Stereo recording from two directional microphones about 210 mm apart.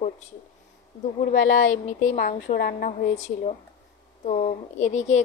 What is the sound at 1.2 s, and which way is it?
Speech, 40° left (ahead or behind).